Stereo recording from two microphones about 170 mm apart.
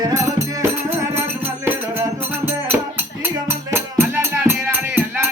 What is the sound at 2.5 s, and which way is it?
Music, 10° right (ahead or behind).